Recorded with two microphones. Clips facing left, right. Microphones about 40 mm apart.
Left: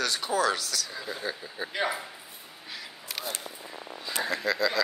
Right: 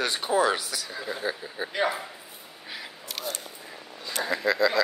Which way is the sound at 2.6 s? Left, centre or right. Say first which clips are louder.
Right 3 dB; centre.